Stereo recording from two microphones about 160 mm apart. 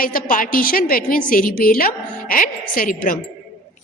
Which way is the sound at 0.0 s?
60° left (ahead or behind).